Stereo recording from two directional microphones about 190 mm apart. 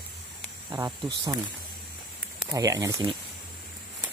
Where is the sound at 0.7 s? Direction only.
15° right (ahead or behind).